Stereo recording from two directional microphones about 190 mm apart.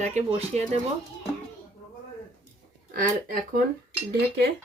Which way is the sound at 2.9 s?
50° right (ahead or behind).